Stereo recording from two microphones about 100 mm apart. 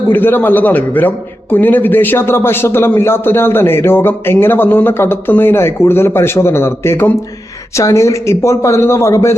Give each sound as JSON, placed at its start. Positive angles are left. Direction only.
{"t": 0.1, "sound": "a man's voice", "side_deg": 20}